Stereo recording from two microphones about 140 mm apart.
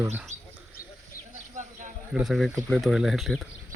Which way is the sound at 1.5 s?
60° right (ahead or behind).